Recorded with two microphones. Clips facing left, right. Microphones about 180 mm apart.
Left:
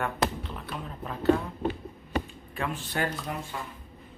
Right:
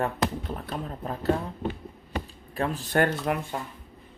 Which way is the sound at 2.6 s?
35° right (ahead or behind).